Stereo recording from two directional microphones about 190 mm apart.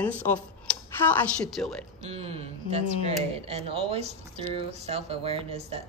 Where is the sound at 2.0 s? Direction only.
30° right (ahead or behind).